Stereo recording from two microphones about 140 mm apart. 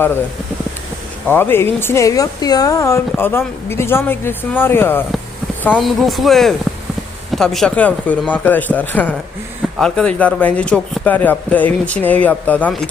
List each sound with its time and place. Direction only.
1.3 s speech: 15° left (ahead or behind)
5.7 s speech: centre (ahead or behind)